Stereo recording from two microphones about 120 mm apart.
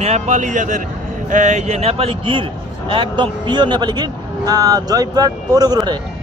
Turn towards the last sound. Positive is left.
turn(degrees=-35)  # may be behind; listen again after turning